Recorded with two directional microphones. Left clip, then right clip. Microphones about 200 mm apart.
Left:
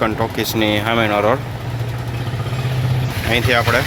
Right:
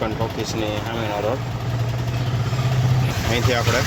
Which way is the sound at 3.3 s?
Centre (ahead or behind).